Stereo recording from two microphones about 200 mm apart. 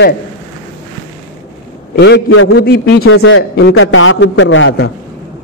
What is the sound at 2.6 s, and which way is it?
Speech, 50° left (ahead or behind).